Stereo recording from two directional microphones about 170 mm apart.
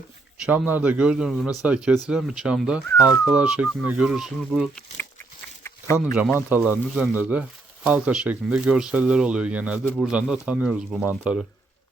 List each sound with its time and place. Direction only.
0.4 s speech: 10° right (ahead or behind)
5.6 s a sound: 15° left (ahead or behind)
6.5 s speech: 10° right (ahead or behind)